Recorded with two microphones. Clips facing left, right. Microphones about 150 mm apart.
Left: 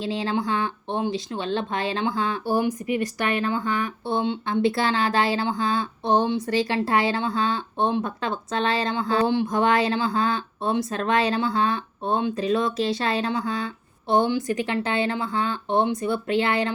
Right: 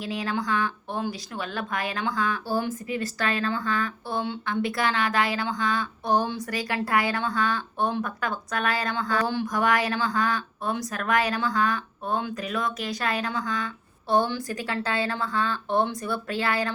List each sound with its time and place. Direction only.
0.0 s a woman's voice: 25° left (ahead or behind)